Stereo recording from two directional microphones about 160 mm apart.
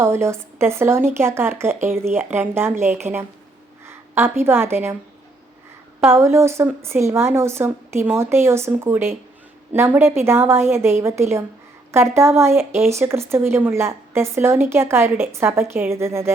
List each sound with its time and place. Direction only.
0.0 s a woman's voice: 15° right (ahead or behind)
6.1 s speech: 15° right (ahead or behind)